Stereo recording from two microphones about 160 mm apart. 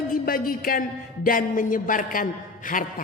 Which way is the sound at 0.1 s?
65° left (ahead or behind).